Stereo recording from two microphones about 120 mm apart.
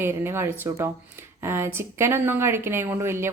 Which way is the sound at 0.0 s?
20° right (ahead or behind).